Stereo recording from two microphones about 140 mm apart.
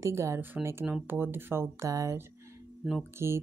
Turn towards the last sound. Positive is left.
turn(degrees=-20)  # may be behind; listen again after turning